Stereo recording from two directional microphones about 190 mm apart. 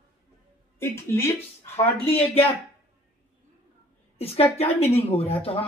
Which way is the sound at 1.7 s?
30° left (ahead or behind).